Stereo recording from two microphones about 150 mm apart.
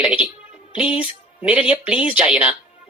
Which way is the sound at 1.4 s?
10° right (ahead or behind).